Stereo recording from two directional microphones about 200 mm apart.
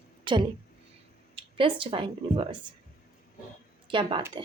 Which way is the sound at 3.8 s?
25° right (ahead or behind).